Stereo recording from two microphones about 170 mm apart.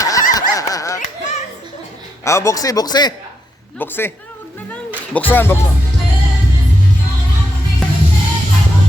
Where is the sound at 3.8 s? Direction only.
15° left (ahead or behind).